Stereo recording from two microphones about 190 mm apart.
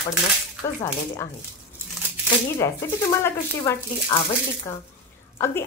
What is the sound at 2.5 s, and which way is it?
A woman's voice, 15° left (ahead or behind).